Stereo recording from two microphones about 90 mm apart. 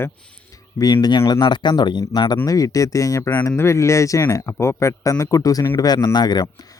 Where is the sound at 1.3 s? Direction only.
55° left (ahead or behind).